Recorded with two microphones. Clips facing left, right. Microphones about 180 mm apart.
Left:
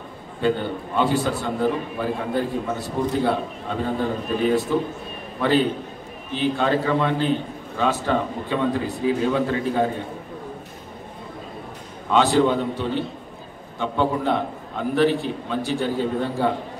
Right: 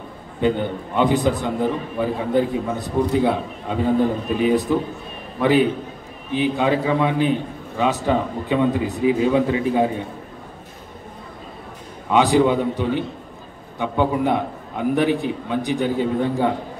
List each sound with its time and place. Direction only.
0.4 s a man's voice: 15° right (ahead or behind)
12.1 s a man's voice: 15° right (ahead or behind)